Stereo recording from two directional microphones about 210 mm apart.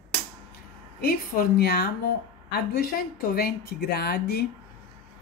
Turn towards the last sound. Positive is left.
turn(degrees=50)  # may be behind; listen again after turning